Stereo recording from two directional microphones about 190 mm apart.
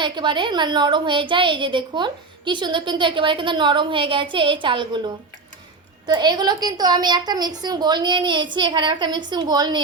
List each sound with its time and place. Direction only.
0.0 s a woman's voice: 25° right (ahead or behind)